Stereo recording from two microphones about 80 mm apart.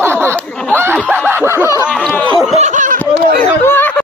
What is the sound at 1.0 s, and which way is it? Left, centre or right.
Snicker, right.